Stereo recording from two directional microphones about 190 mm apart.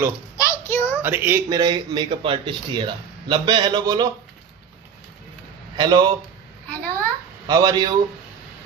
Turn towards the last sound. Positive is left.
turn(degrees=-20)  # may be behind; listen again after turning